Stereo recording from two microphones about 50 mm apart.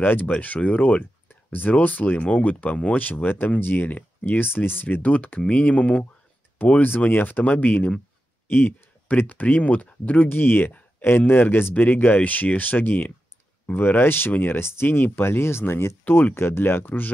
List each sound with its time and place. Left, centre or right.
0.0 s speech: left
0.3 s speech: left
5.0 s speech: left
6.8 s speech: left
8.5 s speech: left
16.0 s speech: left
16.8 s speech: left